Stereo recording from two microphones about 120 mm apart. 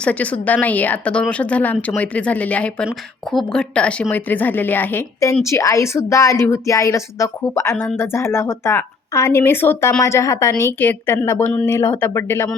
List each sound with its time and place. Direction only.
0.0 s a woman's voice: 10° left (ahead or behind)